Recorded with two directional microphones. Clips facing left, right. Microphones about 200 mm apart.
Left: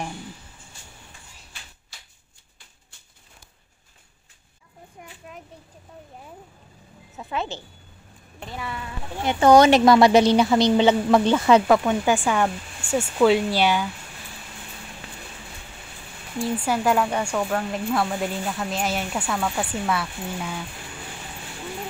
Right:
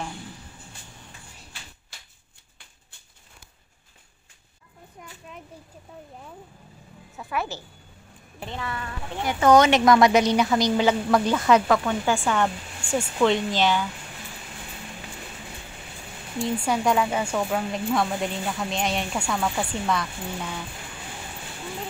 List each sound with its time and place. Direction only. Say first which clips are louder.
7.2 s speech: left 1 dB; 20° left (ahead or behind)
9.2 s speech: left 3 dB; 30° left (ahead or behind)
12.3 s speech: left 1 dB; 10° left (ahead or behind)
16.3 s speech: left 1 dB; 5° left (ahead or behind)